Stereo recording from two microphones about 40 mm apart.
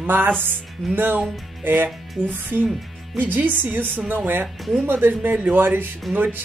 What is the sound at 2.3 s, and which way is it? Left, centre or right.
Speech, right.